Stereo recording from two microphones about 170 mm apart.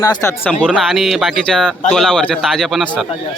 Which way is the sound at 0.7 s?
Centre (ahead or behind).